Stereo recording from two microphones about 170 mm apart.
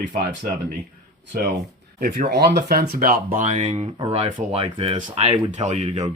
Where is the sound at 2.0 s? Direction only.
50° right (ahead or behind).